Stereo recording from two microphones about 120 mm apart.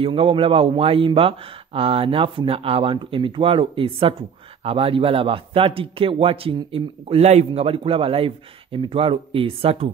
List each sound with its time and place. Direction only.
0.0 s a man's voice: 50° right (ahead or behind)